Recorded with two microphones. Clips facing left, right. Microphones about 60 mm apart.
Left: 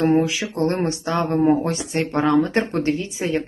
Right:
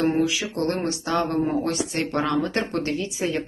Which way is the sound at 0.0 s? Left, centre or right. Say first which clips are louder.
Left 4 dB; left.